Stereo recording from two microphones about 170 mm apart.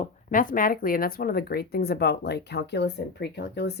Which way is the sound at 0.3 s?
55° left (ahead or behind).